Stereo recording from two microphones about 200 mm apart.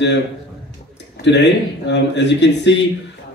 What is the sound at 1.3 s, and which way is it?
A man's voice, 60° left (ahead or behind).